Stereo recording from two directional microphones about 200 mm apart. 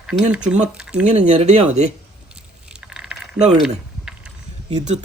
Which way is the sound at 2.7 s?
5° right (ahead or behind).